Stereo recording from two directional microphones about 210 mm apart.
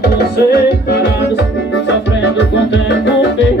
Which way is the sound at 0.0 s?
50° left (ahead or behind).